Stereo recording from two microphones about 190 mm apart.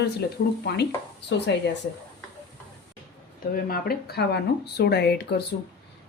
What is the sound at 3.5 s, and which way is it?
Speech, 50° left (ahead or behind).